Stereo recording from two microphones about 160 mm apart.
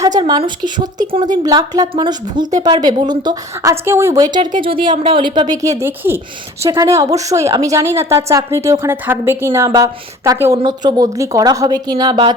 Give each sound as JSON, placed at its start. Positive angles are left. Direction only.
{"t": 0.0, "sound": "a woman's voice", "side_deg": -25}
{"t": 5.8, "sound": "a woman's voice", "side_deg": -15}